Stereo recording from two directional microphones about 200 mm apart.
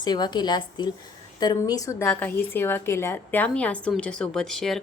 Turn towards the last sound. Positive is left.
turn(degrees=0)  # may be behind; listen again after turning